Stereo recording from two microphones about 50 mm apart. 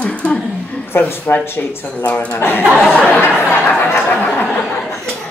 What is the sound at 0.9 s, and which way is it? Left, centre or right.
Speech, left.